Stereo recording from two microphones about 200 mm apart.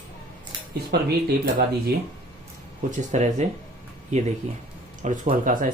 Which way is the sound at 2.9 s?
35° right (ahead or behind).